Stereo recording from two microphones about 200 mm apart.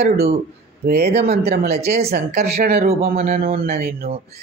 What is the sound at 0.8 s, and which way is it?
Speech, 55° right (ahead or behind).